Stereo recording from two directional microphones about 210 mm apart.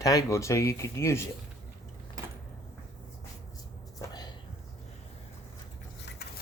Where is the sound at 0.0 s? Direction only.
15° left (ahead or behind).